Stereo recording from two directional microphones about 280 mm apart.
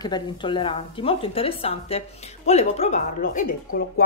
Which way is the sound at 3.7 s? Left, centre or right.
Left.